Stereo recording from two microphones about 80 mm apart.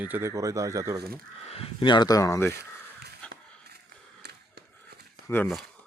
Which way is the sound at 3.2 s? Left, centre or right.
Centre.